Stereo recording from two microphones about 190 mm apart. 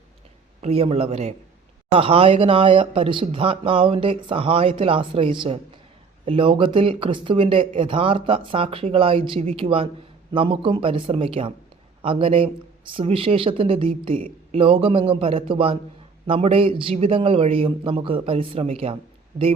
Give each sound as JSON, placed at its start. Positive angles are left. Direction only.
{"t": 0.6, "sound": "a man's voice", "side_deg": -30}